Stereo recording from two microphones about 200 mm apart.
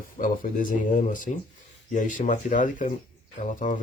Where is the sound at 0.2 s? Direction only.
40° left (ahead or behind).